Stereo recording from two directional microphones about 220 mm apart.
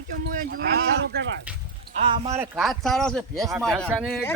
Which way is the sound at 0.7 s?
45° right (ahead or behind).